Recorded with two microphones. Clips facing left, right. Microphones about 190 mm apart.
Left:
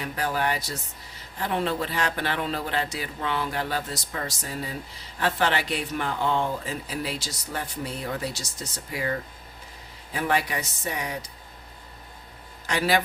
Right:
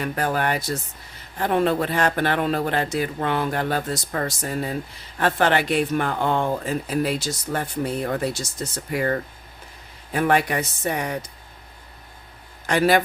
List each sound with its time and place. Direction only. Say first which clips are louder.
0.0 s speech: right 4 dB; 55° right (ahead or behind)
12.6 s speech: right 6 dB; 50° right (ahead or behind)